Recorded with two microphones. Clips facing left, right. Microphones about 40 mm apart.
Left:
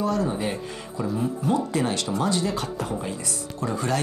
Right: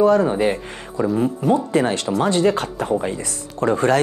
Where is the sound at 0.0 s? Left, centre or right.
Right.